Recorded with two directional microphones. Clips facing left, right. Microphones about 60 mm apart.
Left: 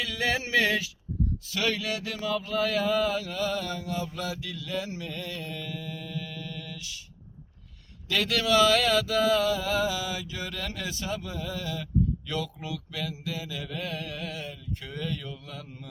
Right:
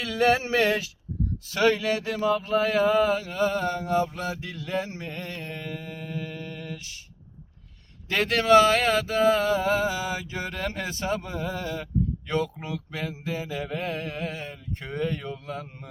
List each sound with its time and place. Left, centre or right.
0.0 s a sound: right
1.5 s speech: right
8.0 s speech: right